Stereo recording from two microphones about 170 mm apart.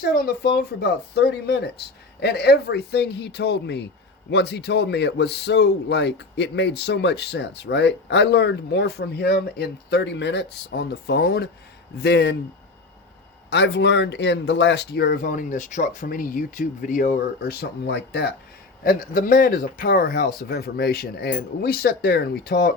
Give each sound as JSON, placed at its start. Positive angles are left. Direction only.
{"t": 0.0, "sound": "a man's voice", "side_deg": 65}
{"t": 13.5, "sound": "speech", "side_deg": 90}
{"t": 17.5, "sound": "speech", "side_deg": 75}
{"t": 18.8, "sound": "speech", "side_deg": 55}